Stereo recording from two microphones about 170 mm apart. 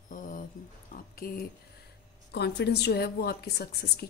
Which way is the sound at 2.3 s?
75° left (ahead or behind).